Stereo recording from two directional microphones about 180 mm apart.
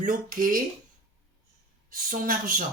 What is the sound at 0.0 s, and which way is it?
Speech, 50° right (ahead or behind).